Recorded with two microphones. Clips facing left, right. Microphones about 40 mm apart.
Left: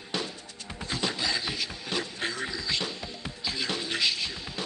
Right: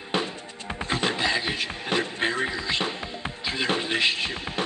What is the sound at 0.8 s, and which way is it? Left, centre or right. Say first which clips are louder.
Music: right 5 dB; right.